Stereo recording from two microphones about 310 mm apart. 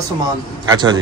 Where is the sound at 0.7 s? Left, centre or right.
Centre.